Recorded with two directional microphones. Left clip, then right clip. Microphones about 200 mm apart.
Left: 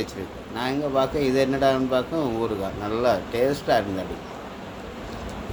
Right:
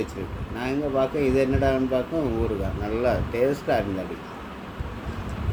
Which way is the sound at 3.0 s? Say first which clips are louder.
Left 1 dB; 10° right (ahead or behind).